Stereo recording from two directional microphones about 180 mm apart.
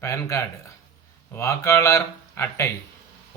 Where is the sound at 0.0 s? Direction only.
15° left (ahead or behind).